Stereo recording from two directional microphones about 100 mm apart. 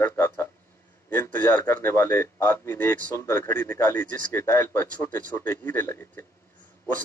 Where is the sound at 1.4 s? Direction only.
30° left (ahead or behind).